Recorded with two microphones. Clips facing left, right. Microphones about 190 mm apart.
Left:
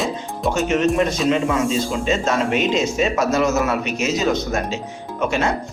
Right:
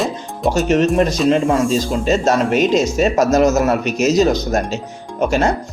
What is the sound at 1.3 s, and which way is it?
Speech, 40° right (ahead or behind).